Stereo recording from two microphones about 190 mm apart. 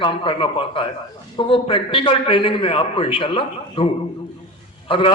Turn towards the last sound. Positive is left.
turn(degrees=30)  # may be behind; listen again after turning